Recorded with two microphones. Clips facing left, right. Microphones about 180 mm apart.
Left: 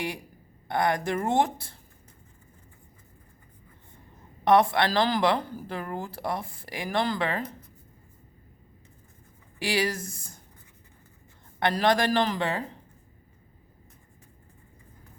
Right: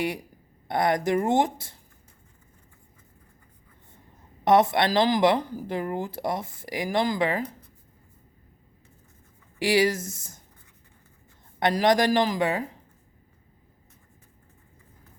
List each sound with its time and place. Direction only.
0.7 s speech: 20° right (ahead or behind)
4.4 s speech: 20° right (ahead or behind)
9.6 s speech: 20° right (ahead or behind)
11.6 s a man's voice: 20° right (ahead or behind)